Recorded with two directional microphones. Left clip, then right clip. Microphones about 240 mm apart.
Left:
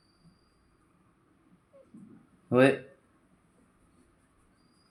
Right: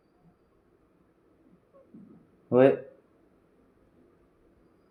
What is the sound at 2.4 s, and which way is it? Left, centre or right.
Speech, left.